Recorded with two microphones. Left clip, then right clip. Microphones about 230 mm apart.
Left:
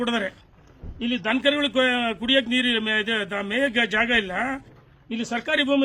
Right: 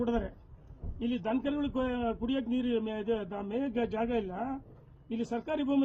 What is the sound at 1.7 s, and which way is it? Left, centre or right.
A man's voice, left.